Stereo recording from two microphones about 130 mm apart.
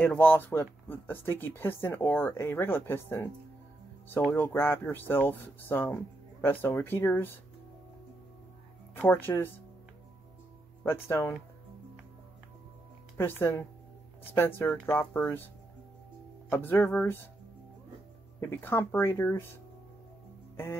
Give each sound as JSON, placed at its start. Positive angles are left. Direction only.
{"t": 0.0, "sound": "speech", "side_deg": 15}
{"t": 4.3, "sound": "speech", "side_deg": 15}
{"t": 8.9, "sound": "speech", "side_deg": 15}
{"t": 10.8, "sound": "speech", "side_deg": 20}
{"t": 13.2, "sound": "speech", "side_deg": 20}
{"t": 16.4, "sound": "speech", "side_deg": 15}
{"t": 18.4, "sound": "speech", "side_deg": 15}